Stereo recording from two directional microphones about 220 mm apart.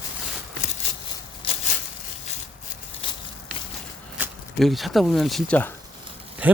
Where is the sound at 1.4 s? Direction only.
25° left (ahead or behind).